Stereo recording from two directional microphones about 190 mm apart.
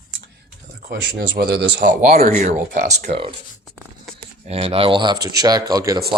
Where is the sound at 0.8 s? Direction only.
55° right (ahead or behind); by 3.3 s 30° right (ahead or behind).